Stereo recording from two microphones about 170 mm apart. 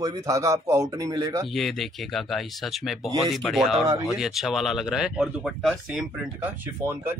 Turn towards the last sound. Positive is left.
turn(degrees=-10)  # may be behind; listen again after turning